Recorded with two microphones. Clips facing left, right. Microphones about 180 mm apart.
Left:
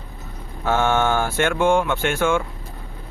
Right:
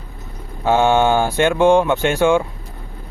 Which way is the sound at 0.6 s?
15° right (ahead or behind).